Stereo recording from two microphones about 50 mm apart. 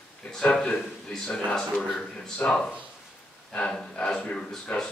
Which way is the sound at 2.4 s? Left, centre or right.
Left.